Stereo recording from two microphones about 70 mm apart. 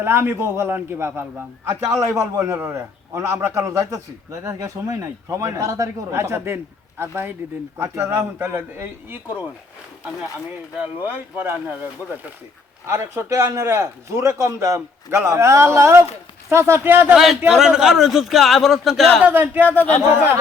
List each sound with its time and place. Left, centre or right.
0.0 s a man's voice: right
6.1 s a man's voice: right
7.9 s speech: centre
8.4 s a man's voice: right
11.0 s speech: right
12.8 s a man's voice: right
16.8 s speech: right
17.5 s a man's voice: centre
19.2 s speech: right
19.6 s speech: left
20.1 s a man's voice: right